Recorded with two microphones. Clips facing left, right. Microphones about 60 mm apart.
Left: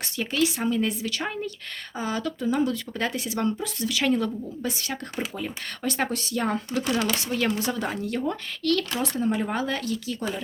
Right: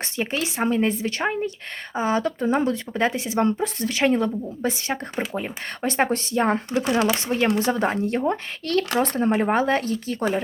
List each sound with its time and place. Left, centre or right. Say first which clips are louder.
0.2 s speech: even; right
8.9 s speech: right 5 dB; right